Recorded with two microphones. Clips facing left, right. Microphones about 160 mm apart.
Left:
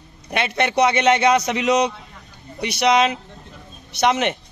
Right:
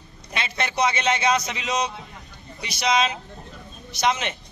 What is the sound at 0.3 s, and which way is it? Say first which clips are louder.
A man's voice: left 7 dB; 65° left (ahead or behind).